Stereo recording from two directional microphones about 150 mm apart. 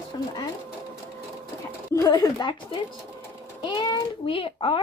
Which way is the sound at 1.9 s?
25° left (ahead or behind).